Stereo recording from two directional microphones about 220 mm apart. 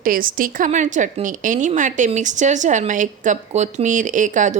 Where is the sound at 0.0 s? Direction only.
40° right (ahead or behind).